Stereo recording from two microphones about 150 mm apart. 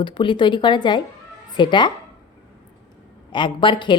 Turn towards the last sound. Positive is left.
turn(degrees=30)  # may be behind; listen again after turning